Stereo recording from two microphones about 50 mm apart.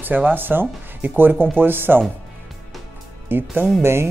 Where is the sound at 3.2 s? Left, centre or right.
Right.